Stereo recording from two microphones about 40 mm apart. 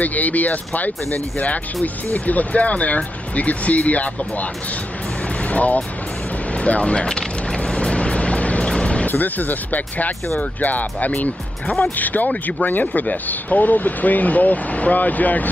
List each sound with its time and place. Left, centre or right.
0.0 s speech: left
5.4 s vehicle: left
6.5 s music: left
9.0 s speech: left